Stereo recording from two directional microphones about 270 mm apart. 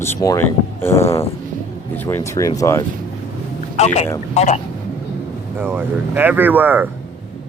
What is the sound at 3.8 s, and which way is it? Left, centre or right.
Speech, left.